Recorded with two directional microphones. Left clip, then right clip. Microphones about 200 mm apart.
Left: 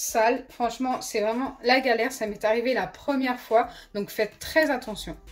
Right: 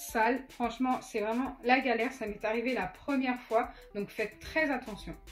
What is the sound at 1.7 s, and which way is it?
A woman's voice, 35° left (ahead or behind).